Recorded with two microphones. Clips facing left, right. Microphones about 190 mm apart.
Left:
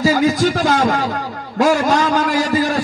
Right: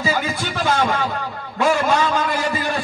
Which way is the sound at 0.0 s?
40° left (ahead or behind).